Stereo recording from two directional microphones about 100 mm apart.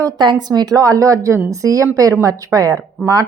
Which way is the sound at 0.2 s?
45° right (ahead or behind).